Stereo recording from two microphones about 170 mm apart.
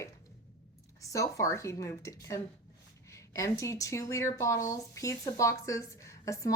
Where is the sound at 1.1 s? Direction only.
20° left (ahead or behind).